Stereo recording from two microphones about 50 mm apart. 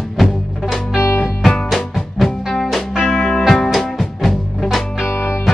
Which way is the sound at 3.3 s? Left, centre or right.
Centre.